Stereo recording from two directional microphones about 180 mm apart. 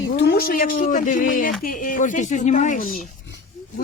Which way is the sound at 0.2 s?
60° left (ahead or behind).